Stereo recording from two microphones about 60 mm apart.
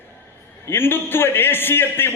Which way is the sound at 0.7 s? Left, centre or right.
Left.